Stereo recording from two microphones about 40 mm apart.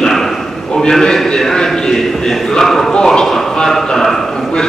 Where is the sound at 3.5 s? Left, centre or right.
Centre.